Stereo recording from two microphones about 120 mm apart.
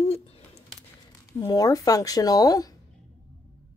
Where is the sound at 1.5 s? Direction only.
30° left (ahead or behind).